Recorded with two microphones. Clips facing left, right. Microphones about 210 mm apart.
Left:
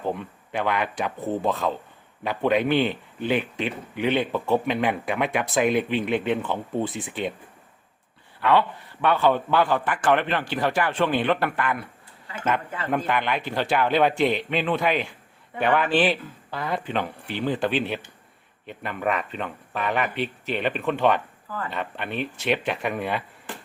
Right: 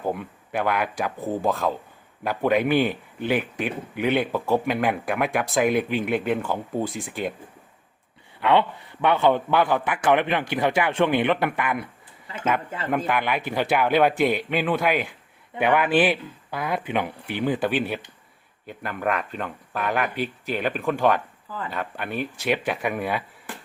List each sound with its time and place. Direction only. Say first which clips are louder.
0.0 s a man's voice: right 1 dB; 5° right (ahead or behind)
8.4 s a man's voice: right 1 dB; 20° right (ahead or behind)
12.9 s a man's voice: right 1 dB; 5° right (ahead or behind)